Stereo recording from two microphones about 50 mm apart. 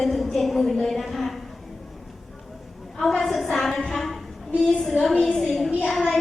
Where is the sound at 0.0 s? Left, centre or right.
Centre.